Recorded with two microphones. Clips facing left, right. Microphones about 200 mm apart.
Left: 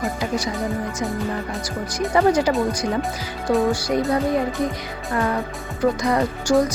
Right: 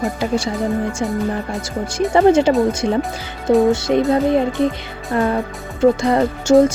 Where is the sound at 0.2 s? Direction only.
30° right (ahead or behind).